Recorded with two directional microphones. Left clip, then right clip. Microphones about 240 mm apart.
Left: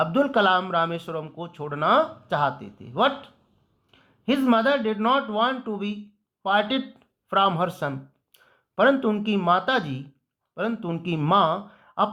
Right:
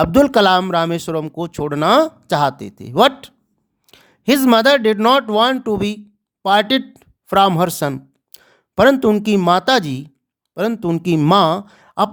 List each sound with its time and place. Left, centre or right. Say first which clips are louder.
0.0 s speech: right 8 dB; right